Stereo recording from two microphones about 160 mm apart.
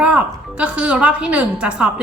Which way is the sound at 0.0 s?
10° right (ahead or behind).